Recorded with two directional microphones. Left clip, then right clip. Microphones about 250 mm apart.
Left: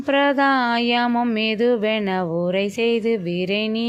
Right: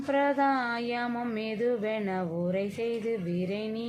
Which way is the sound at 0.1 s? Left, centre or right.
Left.